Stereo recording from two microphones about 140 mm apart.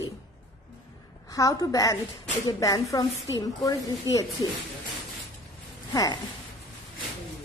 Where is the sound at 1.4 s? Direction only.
25° left (ahead or behind).